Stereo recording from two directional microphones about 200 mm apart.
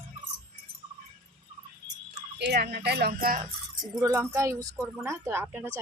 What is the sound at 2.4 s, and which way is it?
Speech, 55° right (ahead or behind).